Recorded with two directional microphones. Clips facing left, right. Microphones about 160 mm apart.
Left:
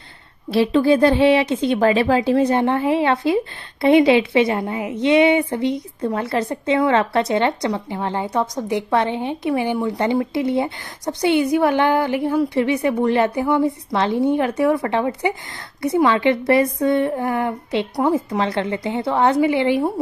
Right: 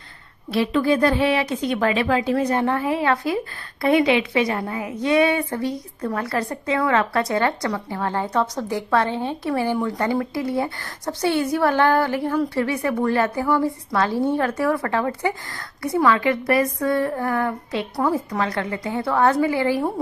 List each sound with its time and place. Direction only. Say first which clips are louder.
0.5 s a woman's voice: left 4 dB; 30° left (ahead or behind)